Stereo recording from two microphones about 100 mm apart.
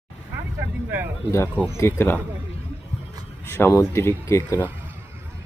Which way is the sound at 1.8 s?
25° left (ahead or behind).